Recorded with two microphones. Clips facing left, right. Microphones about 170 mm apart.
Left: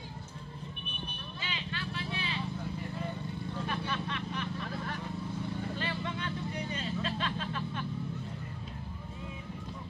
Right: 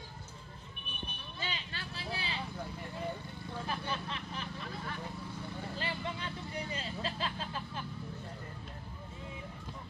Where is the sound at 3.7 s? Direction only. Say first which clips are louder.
Left 1 dB; 30° right (ahead or behind).